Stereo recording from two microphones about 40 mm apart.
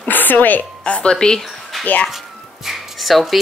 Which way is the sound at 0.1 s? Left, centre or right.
Left.